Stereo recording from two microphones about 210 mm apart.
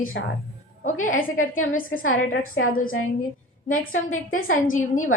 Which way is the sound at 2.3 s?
80° left.